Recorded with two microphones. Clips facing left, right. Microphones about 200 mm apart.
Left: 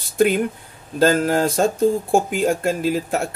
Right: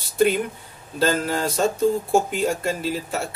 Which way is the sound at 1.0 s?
50° left (ahead or behind).